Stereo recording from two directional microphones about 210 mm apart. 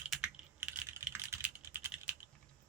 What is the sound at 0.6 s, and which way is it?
Typing, 10° right (ahead or behind).